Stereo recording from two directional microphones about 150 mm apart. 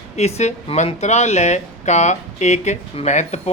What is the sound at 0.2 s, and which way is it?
Speech, 50° left (ahead or behind).